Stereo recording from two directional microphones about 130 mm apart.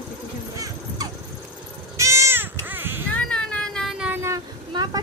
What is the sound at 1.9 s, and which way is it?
Crow, 25° right (ahead or behind).